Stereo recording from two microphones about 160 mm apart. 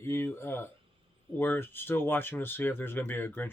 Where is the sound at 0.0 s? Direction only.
15° left (ahead or behind).